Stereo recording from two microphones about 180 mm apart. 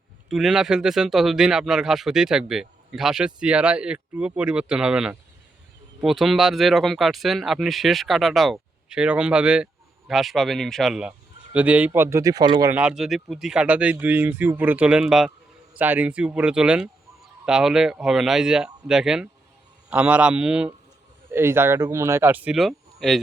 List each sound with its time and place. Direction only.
0.3 s speech: centre (ahead or behind); by 12.7 s 20° right (ahead or behind)
12.7 s speech: 5° right (ahead or behind)